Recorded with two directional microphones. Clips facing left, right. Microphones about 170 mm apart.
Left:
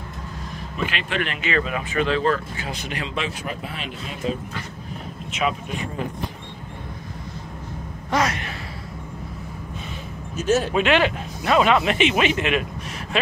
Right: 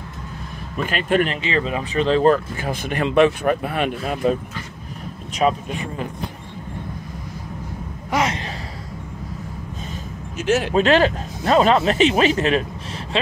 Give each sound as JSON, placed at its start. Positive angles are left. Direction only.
{"t": 0.8, "sound": "speech", "side_deg": -45}
{"t": 1.3, "sound": "speech", "side_deg": -30}
{"t": 5.3, "sound": "speech", "side_deg": -40}
{"t": 8.1, "sound": "gasp", "side_deg": -20}
{"t": 10.7, "sound": "speech", "side_deg": -40}